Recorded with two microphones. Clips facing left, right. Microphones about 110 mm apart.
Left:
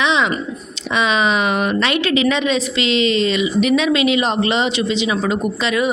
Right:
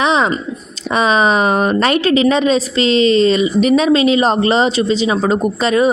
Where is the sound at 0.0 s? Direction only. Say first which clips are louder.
Right 3 dB; 40° right (ahead or behind).